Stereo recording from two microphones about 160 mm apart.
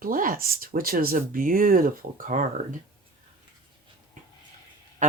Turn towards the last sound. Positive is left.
turn(degrees=-50)  # may be behind; listen again after turning